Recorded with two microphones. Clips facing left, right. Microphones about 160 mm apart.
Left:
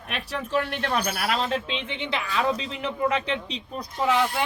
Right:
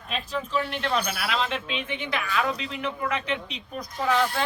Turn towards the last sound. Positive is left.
turn(degrees=15)  # may be behind; listen again after turning